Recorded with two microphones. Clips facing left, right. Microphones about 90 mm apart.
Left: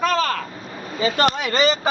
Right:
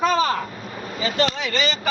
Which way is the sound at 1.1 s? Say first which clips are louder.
Left 2 dB; 50° left (ahead or behind).